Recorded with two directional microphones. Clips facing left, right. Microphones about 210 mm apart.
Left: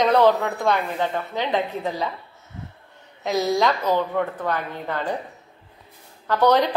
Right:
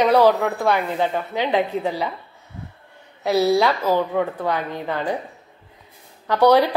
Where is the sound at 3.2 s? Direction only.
10° right (ahead or behind).